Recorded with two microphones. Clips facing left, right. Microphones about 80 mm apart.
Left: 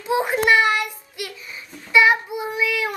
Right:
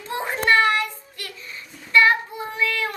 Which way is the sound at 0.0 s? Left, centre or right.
Centre.